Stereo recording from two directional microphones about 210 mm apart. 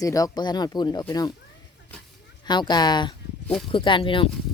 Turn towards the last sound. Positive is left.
turn(degrees=25)  # may be behind; listen again after turning